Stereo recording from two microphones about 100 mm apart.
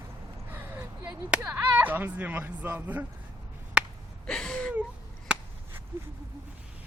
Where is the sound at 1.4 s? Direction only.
20° right (ahead or behind).